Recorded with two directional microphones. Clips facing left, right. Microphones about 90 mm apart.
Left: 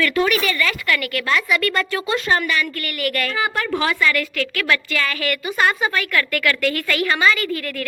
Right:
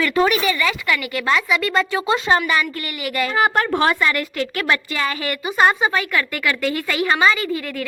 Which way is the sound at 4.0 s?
30° right (ahead or behind).